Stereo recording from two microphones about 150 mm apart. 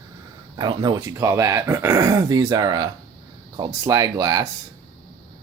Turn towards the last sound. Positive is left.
turn(degrees=-25)  # may be behind; listen again after turning